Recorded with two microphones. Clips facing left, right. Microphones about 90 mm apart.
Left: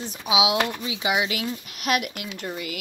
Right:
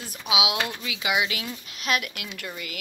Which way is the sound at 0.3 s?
40° left (ahead or behind).